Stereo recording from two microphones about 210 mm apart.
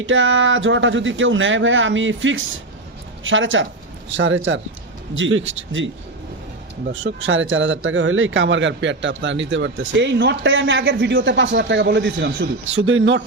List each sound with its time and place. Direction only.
0.0 s speech: 65° right (ahead or behind)
7.0 s speech: 65° right (ahead or behind)